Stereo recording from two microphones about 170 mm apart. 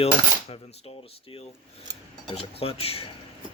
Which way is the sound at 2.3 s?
35° left (ahead or behind).